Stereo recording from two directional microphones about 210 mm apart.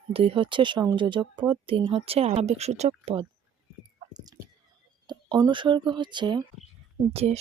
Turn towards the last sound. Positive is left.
turn(degrees=-30)  # may be behind; listen again after turning